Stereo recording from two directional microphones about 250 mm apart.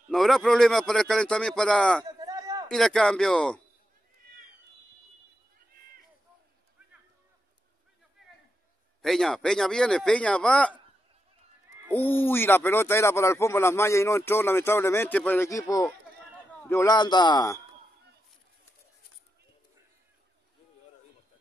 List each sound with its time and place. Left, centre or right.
0.1 s a man's voice: centre
2.0 s a sound: centre
2.7 s a man's voice: centre
9.0 s a man's voice: centre
11.9 s speech: centre